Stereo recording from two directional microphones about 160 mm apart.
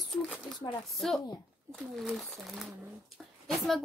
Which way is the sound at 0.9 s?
Centre (ahead or behind).